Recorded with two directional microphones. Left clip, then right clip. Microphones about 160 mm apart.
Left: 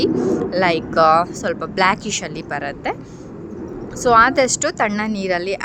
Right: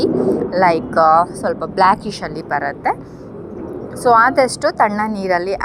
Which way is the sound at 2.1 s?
30° left (ahead or behind).